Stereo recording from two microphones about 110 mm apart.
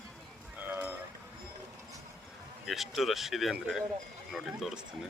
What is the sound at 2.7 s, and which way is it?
Speech, centre (ahead or behind).